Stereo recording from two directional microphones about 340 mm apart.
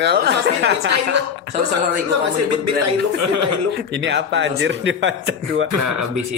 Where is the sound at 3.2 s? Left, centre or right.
Right.